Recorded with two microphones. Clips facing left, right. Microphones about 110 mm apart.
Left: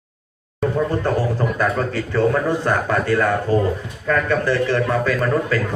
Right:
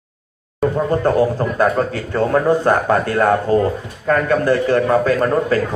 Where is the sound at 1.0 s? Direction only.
45° right (ahead or behind).